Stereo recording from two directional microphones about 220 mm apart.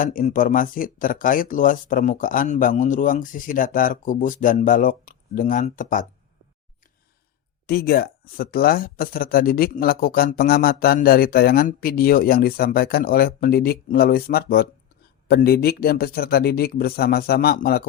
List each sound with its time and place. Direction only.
0.0 s speech: 40° left (ahead or behind)
7.7 s speech: 45° left (ahead or behind)